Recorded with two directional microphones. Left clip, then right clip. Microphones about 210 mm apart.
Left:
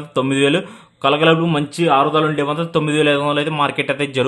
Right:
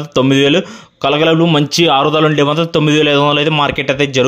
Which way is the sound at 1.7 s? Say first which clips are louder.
Right 2 dB; 40° right (ahead or behind).